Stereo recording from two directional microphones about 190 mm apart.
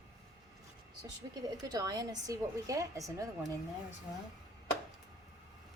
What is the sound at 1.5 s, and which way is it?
A woman's voice, 20° right (ahead or behind).